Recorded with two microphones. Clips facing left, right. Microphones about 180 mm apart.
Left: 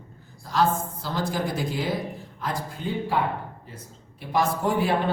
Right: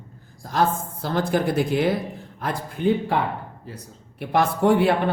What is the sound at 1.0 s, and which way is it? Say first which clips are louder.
Speech: right 6 dB; 60° right (ahead or behind).